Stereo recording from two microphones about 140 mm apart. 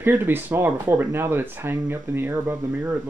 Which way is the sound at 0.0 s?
15° right (ahead or behind).